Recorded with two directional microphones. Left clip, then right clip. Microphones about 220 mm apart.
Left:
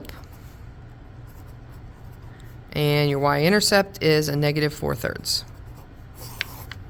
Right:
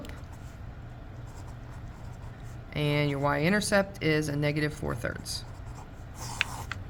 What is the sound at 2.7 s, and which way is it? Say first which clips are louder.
Speech: left 7 dB; 45° left (ahead or behind).